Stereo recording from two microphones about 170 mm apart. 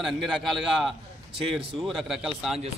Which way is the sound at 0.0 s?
Centre (ahead or behind).